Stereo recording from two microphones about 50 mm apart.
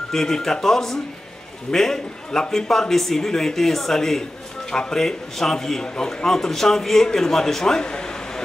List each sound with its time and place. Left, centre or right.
0.1 s speech: centre